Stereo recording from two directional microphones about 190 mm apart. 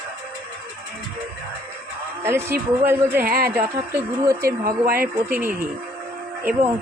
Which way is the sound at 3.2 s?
50° right (ahead or behind).